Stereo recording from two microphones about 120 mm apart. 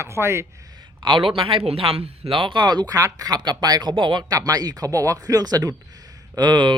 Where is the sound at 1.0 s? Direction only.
40° right (ahead or behind).